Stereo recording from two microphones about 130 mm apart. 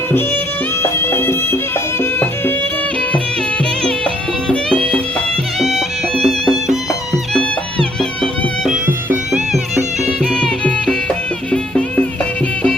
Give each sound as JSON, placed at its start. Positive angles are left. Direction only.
{"t": 0.8, "sound": "music", "side_deg": 20}
{"t": 4.0, "sound": "music", "side_deg": 5}
{"t": 10.2, "sound": "music", "side_deg": 5}